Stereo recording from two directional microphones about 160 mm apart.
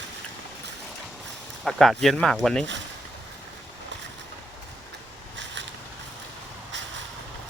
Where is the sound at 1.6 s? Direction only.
Centre (ahead or behind).